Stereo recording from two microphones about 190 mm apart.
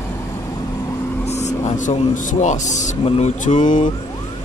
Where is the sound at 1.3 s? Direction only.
35° left (ahead or behind).